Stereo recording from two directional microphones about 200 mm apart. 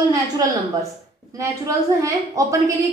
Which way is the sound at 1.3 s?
15° right (ahead or behind).